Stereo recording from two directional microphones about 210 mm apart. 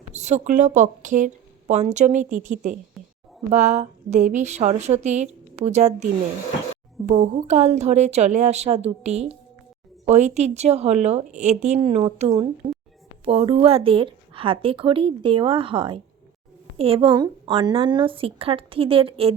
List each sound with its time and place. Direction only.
0.1 s a woman's voice: 35° right (ahead or behind)